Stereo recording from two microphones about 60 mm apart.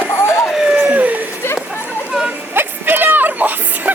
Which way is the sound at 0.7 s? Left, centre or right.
Right.